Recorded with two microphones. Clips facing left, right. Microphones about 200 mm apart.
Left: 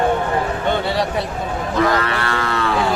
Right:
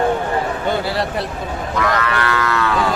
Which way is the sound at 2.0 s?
30° left (ahead or behind).